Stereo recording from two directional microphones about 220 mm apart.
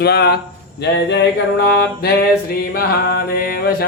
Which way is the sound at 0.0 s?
45° left (ahead or behind).